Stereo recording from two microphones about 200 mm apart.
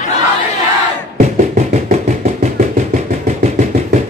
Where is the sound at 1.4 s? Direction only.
35° right (ahead or behind).